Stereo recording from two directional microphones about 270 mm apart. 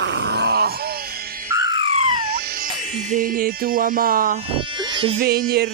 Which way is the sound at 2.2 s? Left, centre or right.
Right.